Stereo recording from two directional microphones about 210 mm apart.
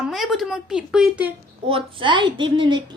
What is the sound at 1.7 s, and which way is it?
A woman's voice, 25° right (ahead or behind).